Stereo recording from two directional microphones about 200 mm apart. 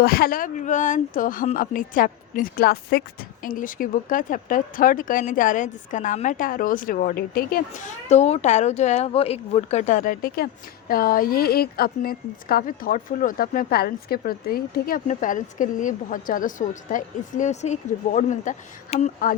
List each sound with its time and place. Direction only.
0.0 s speech: 50° left (ahead or behind)
8.1 s speech: 35° left (ahead or behind)